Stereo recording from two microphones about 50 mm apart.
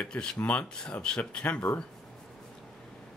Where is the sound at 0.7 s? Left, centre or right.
Centre.